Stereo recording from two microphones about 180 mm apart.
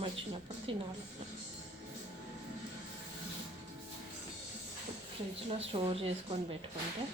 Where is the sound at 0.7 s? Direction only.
30° right (ahead or behind).